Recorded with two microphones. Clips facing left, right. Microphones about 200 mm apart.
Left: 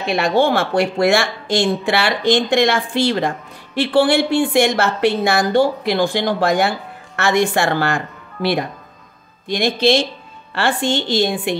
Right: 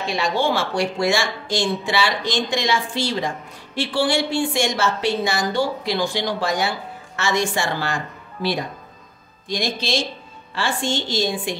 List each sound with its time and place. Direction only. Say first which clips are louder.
0.0 s speech: left 6 dB; 60° left (ahead or behind)